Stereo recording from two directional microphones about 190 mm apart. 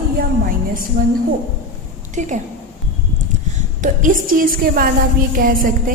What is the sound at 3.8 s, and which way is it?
A woman's voice, 45° right (ahead or behind).